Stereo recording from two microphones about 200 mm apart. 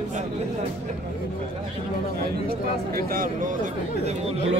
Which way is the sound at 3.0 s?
45° right (ahead or behind).